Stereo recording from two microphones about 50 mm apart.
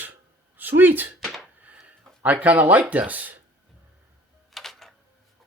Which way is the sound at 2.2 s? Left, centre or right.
Right.